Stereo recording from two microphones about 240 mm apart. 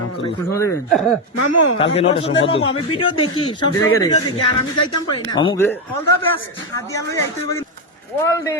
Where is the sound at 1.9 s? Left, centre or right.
Left.